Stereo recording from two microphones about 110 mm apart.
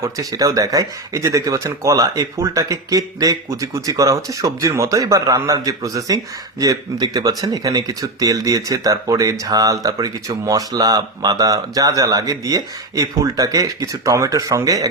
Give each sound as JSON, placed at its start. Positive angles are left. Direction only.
{"t": 0.0, "sound": "speech", "side_deg": -30}